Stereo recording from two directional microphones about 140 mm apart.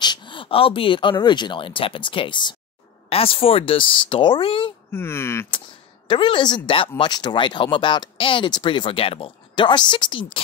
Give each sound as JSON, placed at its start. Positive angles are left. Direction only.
{"t": 0.0, "sound": "speech", "side_deg": 35}
{"t": 4.9, "sound": "speech", "side_deg": 15}
{"t": 6.0, "sound": "speech", "side_deg": 35}